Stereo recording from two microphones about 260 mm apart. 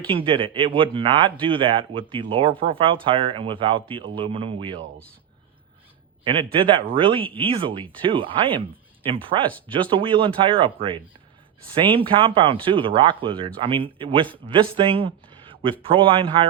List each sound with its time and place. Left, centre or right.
0.1 s speech: centre
6.2 s speech: centre